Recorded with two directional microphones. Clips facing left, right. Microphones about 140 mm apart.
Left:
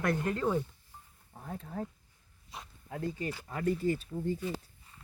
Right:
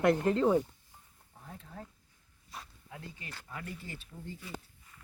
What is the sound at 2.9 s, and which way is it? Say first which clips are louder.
Speech: left 15 dB; 45° left (ahead or behind).